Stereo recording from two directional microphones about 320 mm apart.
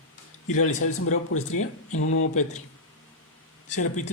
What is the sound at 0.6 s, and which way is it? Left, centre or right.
Speech, left.